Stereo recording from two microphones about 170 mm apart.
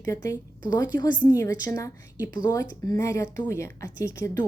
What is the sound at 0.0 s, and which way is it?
A woman's voice, 20° left (ahead or behind).